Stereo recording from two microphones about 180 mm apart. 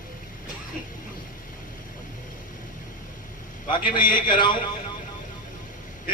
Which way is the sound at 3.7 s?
25° left (ahead or behind).